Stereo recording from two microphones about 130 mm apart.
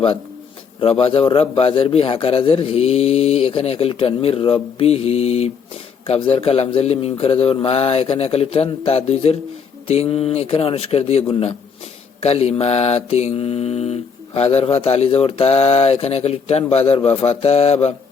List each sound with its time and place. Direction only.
0.8 s mantra: 45° left (ahead or behind)